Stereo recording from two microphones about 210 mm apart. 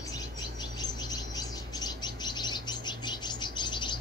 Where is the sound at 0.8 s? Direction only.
20° left (ahead or behind).